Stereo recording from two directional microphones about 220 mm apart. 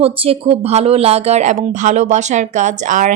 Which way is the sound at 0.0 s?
25° right (ahead or behind).